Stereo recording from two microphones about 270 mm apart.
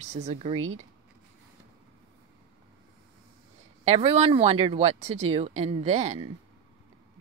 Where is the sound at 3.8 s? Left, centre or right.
Right.